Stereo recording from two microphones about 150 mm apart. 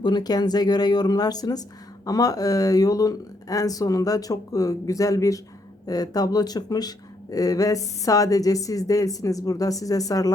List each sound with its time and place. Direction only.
0.0 s speech: 30° left (ahead or behind)